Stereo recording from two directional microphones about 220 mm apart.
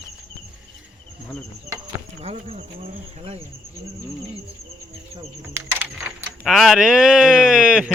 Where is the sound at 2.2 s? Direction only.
30° right (ahead or behind).